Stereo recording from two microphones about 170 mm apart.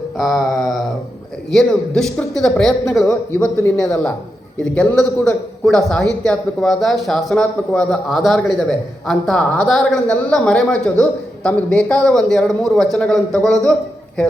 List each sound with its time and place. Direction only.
0.2 s a sound: centre (ahead or behind)
1.5 s a man's voice: 5° left (ahead or behind)
3.3 s speech: 15° left (ahead or behind)
4.7 s a man's voice: 5° left (ahead or behind)